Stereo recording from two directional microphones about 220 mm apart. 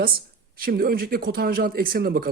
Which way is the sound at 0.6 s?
40° right (ahead or behind).